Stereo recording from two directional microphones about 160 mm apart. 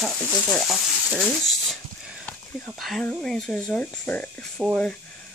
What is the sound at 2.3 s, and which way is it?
Speech, 5° left (ahead or behind).